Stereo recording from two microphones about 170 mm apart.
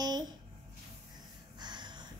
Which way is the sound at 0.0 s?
25° right (ahead or behind).